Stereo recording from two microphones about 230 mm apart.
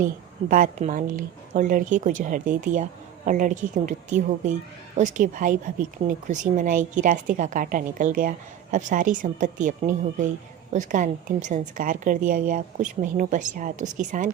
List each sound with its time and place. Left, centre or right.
0.0 s a woman's voice: right